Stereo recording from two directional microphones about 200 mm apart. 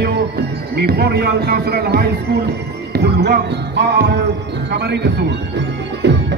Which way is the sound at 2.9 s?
55° right (ahead or behind).